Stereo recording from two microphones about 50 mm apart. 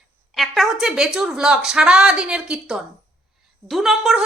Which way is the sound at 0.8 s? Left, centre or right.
Centre.